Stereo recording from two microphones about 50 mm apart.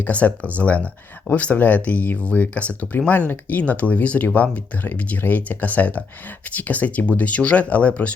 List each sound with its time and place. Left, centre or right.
0.0 s speech: left